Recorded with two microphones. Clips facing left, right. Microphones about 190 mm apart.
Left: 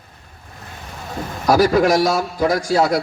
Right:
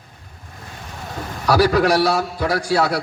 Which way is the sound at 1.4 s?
40° left (ahead or behind).